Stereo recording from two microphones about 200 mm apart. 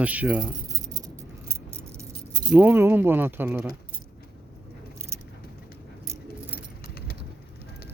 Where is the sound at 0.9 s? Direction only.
15° right (ahead or behind).